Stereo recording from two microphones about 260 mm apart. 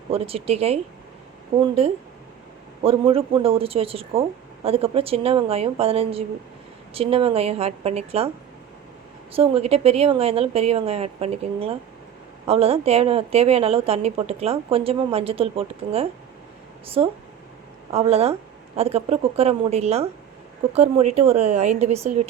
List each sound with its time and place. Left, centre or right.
0.1 s a woman's voice: right
2.8 s a woman's voice: right
9.3 s a woman's voice: right